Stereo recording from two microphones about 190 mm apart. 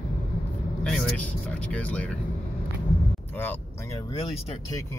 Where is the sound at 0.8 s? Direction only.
Centre (ahead or behind).